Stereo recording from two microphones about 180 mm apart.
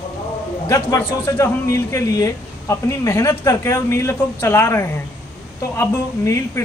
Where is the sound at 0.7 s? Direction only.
15° left (ahead or behind).